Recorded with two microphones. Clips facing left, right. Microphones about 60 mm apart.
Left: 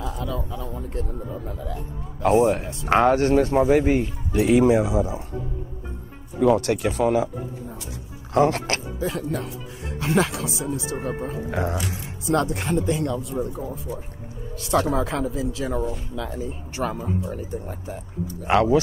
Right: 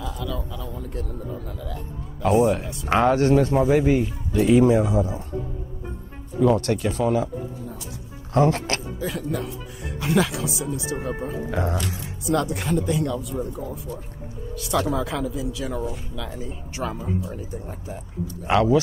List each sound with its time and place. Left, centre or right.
0.0 s a man's voice: left
4.3 s speech: left
4.7 s speech: centre
6.4 s speech: left
8.4 s speech: left
8.6 s a man's voice: left
11.6 s speech: centre
12.4 s a man's voice: left
13.4 s speech: left
14.5 s a man's voice: left
17.8 s a man's voice: left